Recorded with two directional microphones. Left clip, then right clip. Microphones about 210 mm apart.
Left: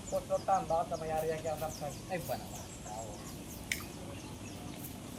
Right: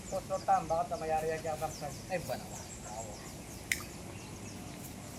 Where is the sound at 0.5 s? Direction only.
25° right (ahead or behind).